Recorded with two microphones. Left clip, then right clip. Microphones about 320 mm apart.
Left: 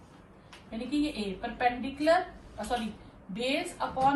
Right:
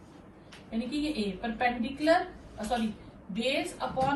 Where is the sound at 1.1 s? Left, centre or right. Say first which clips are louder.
Right 2 dB; centre.